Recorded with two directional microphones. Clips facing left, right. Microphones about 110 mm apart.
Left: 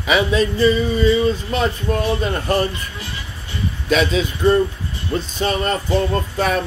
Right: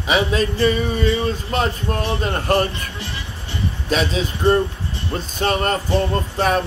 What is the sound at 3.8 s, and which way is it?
Speech, 40° right (ahead or behind).